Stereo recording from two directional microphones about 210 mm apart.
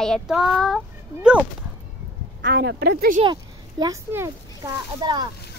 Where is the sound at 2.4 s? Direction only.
55° right (ahead or behind).